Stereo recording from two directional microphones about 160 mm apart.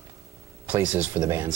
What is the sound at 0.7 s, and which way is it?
Speech, 10° right (ahead or behind).